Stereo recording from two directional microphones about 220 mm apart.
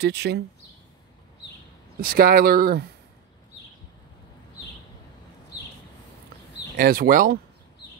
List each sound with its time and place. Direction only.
0.0 s speech: 50° right (ahead or behind)
2.0 s speech: 40° right (ahead or behind)
6.8 s speech: 40° right (ahead or behind)